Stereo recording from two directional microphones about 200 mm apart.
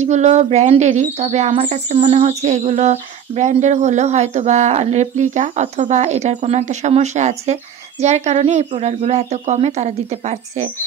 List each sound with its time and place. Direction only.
0.0 s speech: 35° right (ahead or behind)